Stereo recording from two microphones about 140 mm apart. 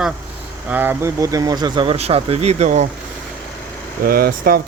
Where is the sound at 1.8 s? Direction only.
45° right (ahead or behind).